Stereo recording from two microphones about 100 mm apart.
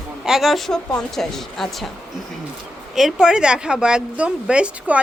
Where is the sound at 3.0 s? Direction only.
5° right (ahead or behind).